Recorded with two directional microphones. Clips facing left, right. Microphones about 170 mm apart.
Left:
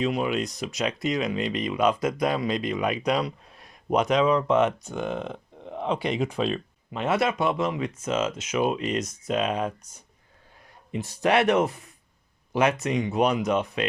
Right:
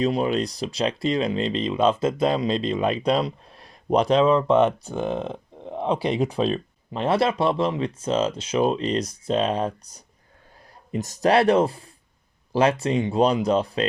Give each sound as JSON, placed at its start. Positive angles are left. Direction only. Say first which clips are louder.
{"t": 0.0, "sound": "speech", "louder": "right 3 dB", "side_deg": -35}